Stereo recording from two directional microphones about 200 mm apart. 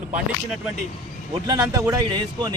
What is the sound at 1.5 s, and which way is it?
Speech, 20° right (ahead or behind).